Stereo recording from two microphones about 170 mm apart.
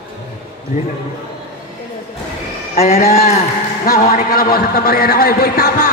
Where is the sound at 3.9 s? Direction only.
55° left (ahead or behind).